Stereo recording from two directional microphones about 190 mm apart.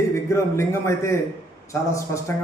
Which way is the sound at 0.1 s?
15° left (ahead or behind).